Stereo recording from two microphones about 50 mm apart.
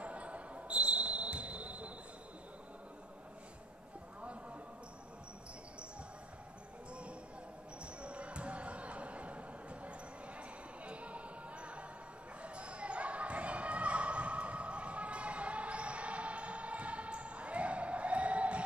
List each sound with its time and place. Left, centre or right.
0.0 s basketball bounce: right
6.9 s basketball bounce: right